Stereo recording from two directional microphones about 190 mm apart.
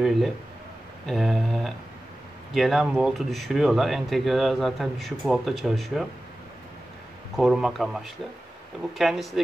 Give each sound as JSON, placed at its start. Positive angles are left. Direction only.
{"t": 0.0, "sound": "speech", "side_deg": 0}
{"t": 7.3, "sound": "speech", "side_deg": 0}